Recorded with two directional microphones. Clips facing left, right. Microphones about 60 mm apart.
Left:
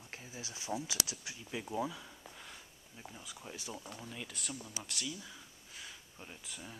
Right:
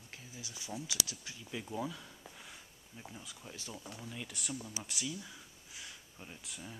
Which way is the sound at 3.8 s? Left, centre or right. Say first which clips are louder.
Even; centre.